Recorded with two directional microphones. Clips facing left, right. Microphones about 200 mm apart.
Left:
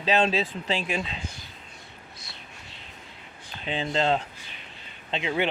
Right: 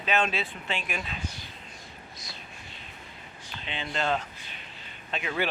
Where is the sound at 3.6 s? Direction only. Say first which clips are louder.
Left 5 dB; 35° left (ahead or behind).